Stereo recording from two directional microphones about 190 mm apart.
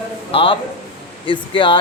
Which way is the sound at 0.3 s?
30° left (ahead or behind).